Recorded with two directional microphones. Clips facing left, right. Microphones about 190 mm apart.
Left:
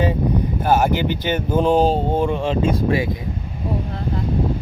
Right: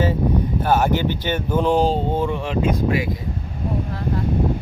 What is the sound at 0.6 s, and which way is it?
Speech, 10° left (ahead or behind).